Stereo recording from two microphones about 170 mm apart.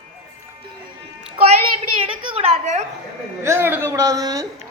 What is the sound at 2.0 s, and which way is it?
Speech, 30° right (ahead or behind).